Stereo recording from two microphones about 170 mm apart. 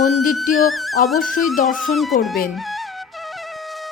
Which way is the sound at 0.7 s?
Centre (ahead or behind).